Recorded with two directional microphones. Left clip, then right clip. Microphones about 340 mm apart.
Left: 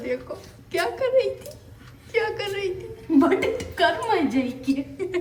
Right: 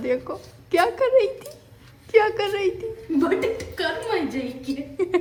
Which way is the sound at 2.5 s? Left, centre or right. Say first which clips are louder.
Right 4 dB; centre.